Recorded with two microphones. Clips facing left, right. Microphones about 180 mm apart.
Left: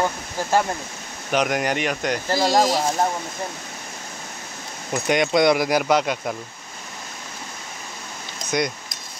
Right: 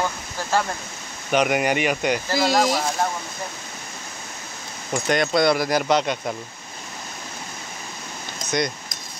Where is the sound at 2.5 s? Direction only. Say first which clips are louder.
Left 2 dB; 15° left (ahead or behind).